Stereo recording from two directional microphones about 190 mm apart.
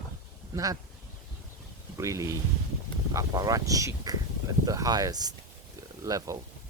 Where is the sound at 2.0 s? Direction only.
15° right (ahead or behind).